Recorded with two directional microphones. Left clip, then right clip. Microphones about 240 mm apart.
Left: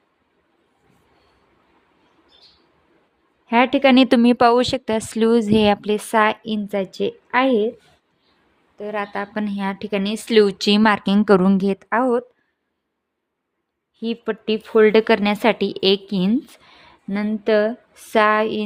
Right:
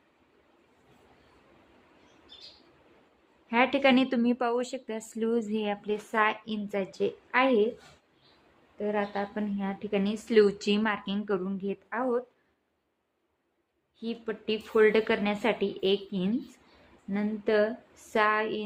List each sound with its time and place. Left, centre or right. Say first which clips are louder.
3.4 s a woman's voice: left 8 dB; left
8.7 s a woman's voice: left 5 dB; left
14.0 s a woman's voice: left 10 dB; left